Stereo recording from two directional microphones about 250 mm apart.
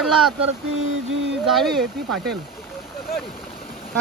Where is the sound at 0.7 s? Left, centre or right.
Right.